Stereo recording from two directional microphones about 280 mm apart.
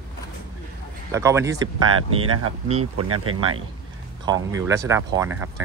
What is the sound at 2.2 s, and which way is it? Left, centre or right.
Speech, right.